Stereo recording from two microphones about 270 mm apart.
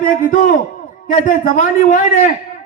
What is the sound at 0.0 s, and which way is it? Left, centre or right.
A man's voice, left.